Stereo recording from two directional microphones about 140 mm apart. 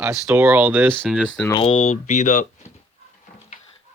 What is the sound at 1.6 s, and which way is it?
Speech, 50° left (ahead or behind).